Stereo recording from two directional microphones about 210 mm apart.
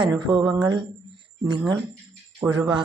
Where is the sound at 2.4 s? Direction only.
10° right (ahead or behind).